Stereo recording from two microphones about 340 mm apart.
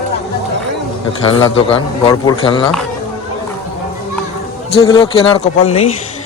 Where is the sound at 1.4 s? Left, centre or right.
Centre.